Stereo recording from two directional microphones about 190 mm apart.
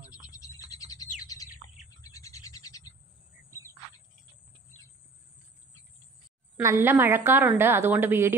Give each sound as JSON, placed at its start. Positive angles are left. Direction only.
{"t": 0.1, "sound": "bird", "side_deg": 20}
{"t": 6.5, "sound": "a woman's voice", "side_deg": -15}